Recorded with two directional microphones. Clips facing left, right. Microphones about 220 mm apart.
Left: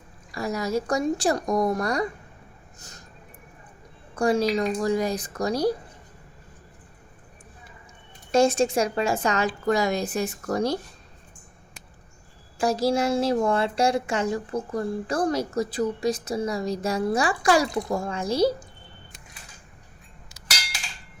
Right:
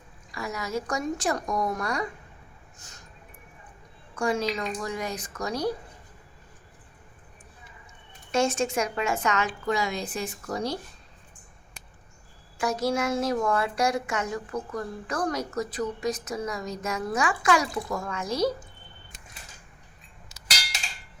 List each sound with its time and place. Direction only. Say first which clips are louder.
0.3 s a woman's voice: left 6 dB; 35° left (ahead or behind)
2.7 s a sound: left 6 dB; 35° left (ahead or behind)
4.1 s a woman's voice: left 5 dB; 35° left (ahead or behind)
8.3 s a woman's voice: left 5 dB; 35° left (ahead or behind)
12.5 s a woman's voice: left 4 dB; 30° left (ahead or behind)